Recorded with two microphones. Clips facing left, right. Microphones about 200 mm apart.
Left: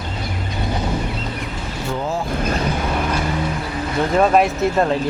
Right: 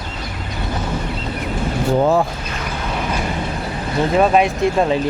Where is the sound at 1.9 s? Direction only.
60° right (ahead or behind).